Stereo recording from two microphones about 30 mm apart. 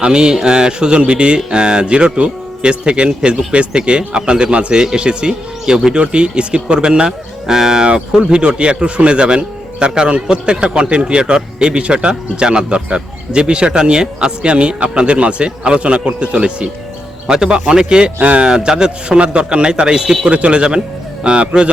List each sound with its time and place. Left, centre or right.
0.0 s a man's voice: right
7.4 s speech: centre
7.9 s a man's voice: right
14.4 s a man's voice: right
17.3 s a man's voice: right
18.4 s a man's voice: right
20.3 s a man's voice: right